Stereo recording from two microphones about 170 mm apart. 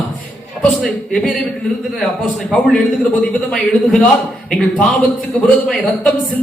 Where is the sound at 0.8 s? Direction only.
5° left (ahead or behind).